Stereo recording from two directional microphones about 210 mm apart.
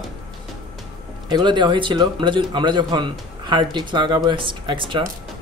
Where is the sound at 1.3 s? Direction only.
20° right (ahead or behind).